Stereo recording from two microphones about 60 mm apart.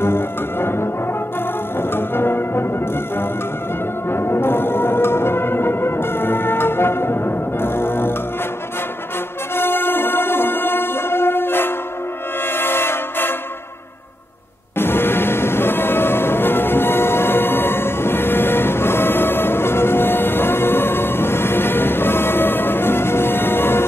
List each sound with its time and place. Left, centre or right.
0.0 s music: left
4.1 s music: left
9.6 s music: left
12.5 s train: left
14.8 s music: left